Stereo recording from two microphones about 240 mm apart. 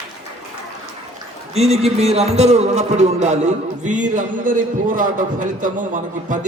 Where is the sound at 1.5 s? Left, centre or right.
Right.